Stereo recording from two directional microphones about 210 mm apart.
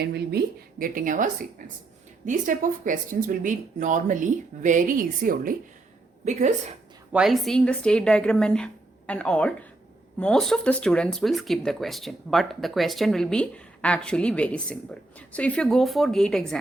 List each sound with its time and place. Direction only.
0.0 s speech: 50° right (ahead or behind)
7.1 s speech: centre (ahead or behind)